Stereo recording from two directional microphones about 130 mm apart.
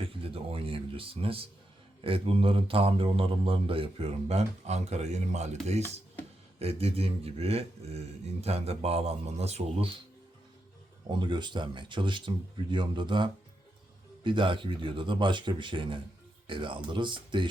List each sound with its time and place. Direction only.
0.0 s speech: 45° right (ahead or behind)
11.1 s speech: 35° right (ahead or behind)